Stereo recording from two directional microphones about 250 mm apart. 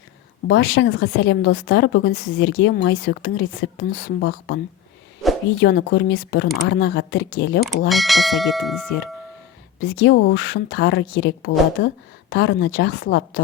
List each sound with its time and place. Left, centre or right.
0.4 s a woman's voice: left
5.6 s a woman's voice: left
7.9 s speech: centre
9.8 s a woman's voice: left